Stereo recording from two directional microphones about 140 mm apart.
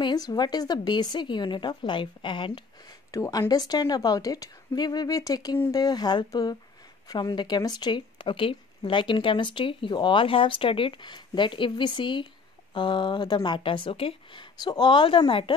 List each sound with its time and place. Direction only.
0.0 s speech: 30° left (ahead or behind)
3.1 s a woman's voice: 25° left (ahead or behind)